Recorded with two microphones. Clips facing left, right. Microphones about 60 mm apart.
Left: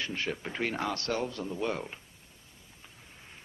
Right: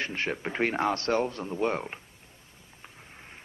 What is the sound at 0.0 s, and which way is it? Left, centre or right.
Speech, right.